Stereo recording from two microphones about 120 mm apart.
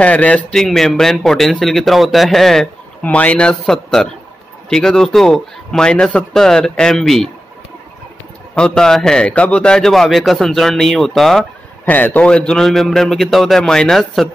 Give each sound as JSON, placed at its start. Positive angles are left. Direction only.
{"t": 0.0, "sound": "a man's voice", "side_deg": 10}
{"t": 8.5, "sound": "a man's voice", "side_deg": 5}
{"t": 11.9, "sound": "a man's voice", "side_deg": 15}